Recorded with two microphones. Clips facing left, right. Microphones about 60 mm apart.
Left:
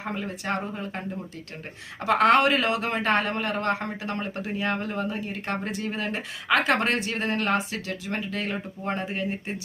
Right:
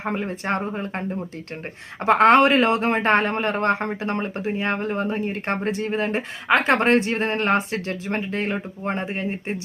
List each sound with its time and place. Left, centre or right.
0.0 s a man's voice: right